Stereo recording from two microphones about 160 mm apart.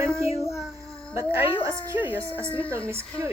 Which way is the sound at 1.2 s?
15° right (ahead or behind).